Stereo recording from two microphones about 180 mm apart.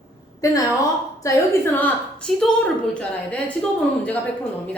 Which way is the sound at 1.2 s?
10° left (ahead or behind).